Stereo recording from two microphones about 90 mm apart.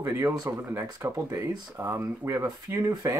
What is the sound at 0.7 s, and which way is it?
Speech, 30° right (ahead or behind).